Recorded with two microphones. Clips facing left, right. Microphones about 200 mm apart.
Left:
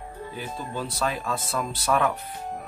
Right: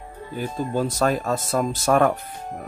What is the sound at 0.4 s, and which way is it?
Speech, 45° right (ahead or behind).